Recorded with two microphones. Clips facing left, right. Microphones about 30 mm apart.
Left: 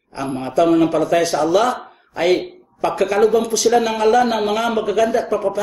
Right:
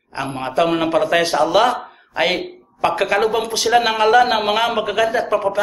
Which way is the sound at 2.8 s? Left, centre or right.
Right.